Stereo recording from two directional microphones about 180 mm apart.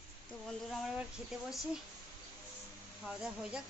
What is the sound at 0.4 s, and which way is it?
Speech, centre (ahead or behind).